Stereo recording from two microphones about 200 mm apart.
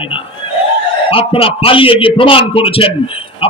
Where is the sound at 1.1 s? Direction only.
25° left (ahead or behind).